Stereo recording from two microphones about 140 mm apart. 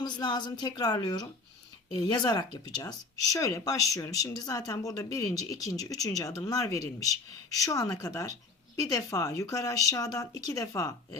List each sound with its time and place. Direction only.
0.0 s speech: 30° left (ahead or behind)